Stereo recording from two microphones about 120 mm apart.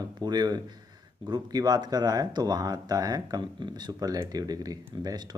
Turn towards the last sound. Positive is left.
turn(degrees=-35)  # may be behind; listen again after turning